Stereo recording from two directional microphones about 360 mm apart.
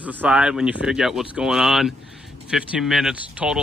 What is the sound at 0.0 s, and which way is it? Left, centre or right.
Speech, centre.